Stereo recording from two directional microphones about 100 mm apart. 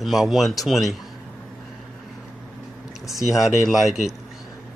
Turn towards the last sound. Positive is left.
turn(degrees=-5)  # may be behind; listen again after turning